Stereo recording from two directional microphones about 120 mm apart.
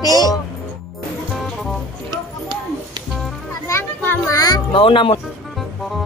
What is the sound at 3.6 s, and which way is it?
Music, 20° left (ahead or behind).